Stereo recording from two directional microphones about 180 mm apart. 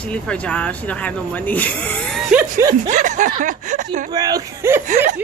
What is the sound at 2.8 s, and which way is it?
Speech, 45° right (ahead or behind).